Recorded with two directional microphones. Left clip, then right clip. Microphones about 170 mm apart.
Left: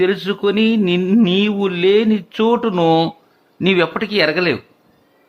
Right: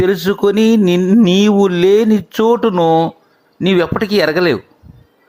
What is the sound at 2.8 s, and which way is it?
Speech, 5° left (ahead or behind).